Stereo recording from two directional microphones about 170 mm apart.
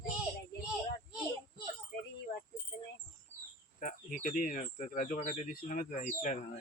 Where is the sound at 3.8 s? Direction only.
50° left (ahead or behind).